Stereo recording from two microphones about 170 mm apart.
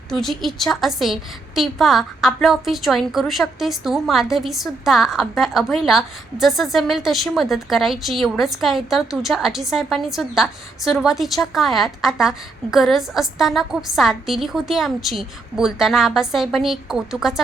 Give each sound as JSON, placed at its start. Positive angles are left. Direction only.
{"t": 0.1, "sound": "a woman's voice", "side_deg": 0}